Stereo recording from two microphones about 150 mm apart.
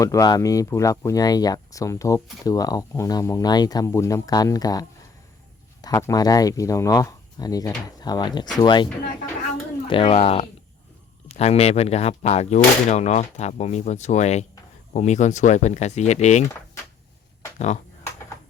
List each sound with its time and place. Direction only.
0.0 s speech: 25° left (ahead or behind)
9.9 s speech: 40° left (ahead or behind)